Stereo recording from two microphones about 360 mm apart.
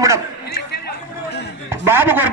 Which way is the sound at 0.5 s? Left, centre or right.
Left.